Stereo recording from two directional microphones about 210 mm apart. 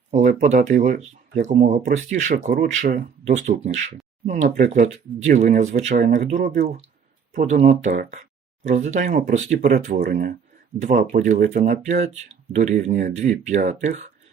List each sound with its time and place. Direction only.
0.1 s speech: 35° right (ahead or behind)